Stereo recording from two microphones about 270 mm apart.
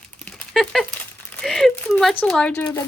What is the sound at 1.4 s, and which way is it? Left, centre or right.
Speech, centre.